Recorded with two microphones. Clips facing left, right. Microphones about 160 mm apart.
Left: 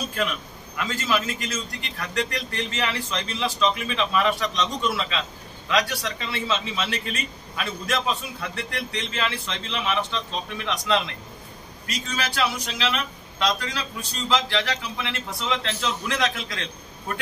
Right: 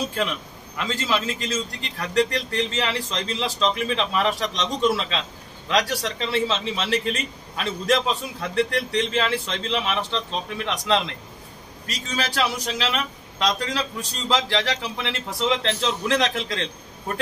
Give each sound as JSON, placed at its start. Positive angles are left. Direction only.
{"t": 0.7, "sound": "a man's voice", "side_deg": -30}
{"t": 12.2, "sound": "a man's voice", "side_deg": -35}